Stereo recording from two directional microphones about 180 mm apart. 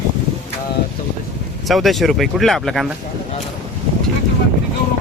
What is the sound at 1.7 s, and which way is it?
Speech, centre (ahead or behind).